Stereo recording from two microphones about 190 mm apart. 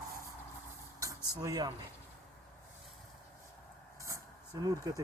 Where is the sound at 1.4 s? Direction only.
20° right (ahead or behind).